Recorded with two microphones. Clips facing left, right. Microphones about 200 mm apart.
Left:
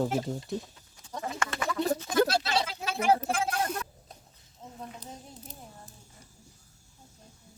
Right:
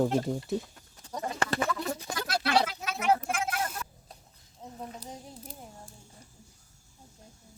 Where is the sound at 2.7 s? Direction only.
30° left (ahead or behind).